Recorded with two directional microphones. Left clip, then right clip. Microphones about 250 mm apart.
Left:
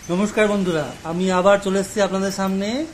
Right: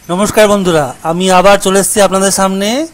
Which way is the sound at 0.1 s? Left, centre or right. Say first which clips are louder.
Right 11 dB; right.